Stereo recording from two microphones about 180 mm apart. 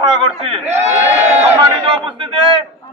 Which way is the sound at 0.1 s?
30° right (ahead or behind).